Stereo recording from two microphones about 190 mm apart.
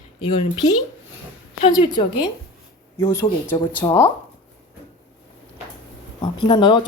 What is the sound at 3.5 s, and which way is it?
Speech, 25° left (ahead or behind).